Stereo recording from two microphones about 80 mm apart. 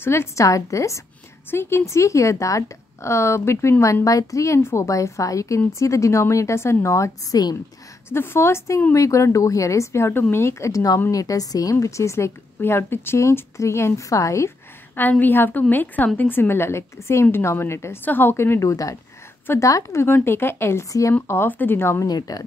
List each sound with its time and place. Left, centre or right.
0.0 s speech: left
1.5 s speech: left
8.1 s a woman's voice: left
15.0 s speech: left
21.3 s speech: left
22.0 s a woman's voice: left